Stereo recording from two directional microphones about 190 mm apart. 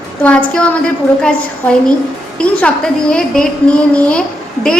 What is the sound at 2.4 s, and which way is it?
A woman's voice, 5° left (ahead or behind).